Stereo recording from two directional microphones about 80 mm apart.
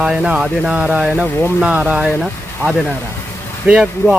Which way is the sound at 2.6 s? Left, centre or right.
Centre.